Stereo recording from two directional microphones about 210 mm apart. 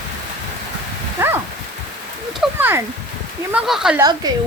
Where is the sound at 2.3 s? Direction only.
5° right (ahead or behind).